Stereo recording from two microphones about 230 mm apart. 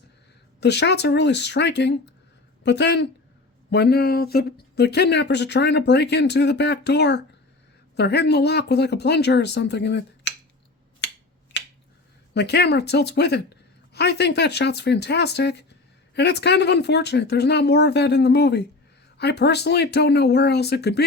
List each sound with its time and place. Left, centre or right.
0.6 s speech: left
11.0 s finger snapping: left
12.3 s speech: left